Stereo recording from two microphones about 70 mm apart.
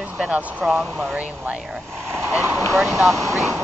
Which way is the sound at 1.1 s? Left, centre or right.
Right.